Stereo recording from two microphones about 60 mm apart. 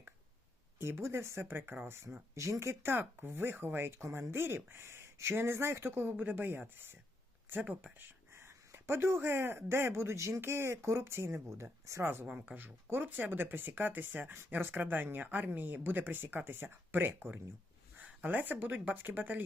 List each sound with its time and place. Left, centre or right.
0.8 s speech: right
2.3 s speech: right
7.9 s speech: right
10.4 s speech: right
12.2 s speech: centre
12.5 s speech: right